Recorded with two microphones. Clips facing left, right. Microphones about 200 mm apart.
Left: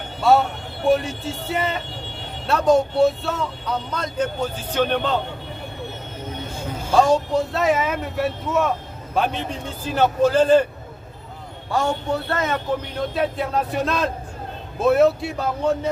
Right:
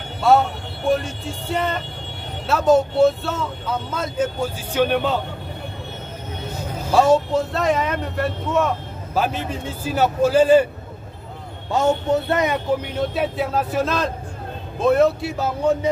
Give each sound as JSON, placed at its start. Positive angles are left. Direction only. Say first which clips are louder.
{"t": 0.2, "sound": "speech", "louder": "right 1 dB", "side_deg": 0}
{"t": 6.9, "sound": "a man's voice", "louder": "right 1 dB", "side_deg": -5}
{"t": 11.7, "sound": "speech", "louder": "right 4 dB", "side_deg": -20}
{"t": 12.9, "sound": "speech", "louder": "right 1 dB", "side_deg": -5}